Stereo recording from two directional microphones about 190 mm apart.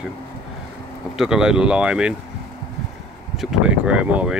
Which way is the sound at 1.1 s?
5° right (ahead or behind).